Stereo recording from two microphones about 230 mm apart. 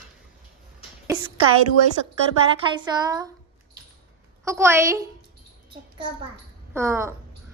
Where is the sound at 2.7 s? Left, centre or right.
Centre.